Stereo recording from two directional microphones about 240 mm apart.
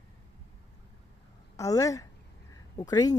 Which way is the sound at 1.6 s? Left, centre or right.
Centre.